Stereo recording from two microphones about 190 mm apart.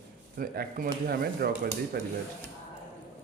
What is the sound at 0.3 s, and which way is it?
Speech, 50° right (ahead or behind).